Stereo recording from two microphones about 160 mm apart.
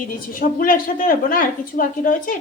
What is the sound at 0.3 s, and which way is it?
A woman's voice, 60° left (ahead or behind).